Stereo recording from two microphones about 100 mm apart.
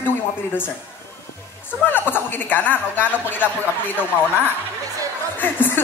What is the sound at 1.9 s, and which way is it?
Speech, 20° left (ahead or behind).